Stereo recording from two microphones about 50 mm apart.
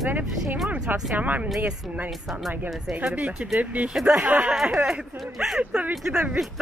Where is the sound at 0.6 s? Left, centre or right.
Right.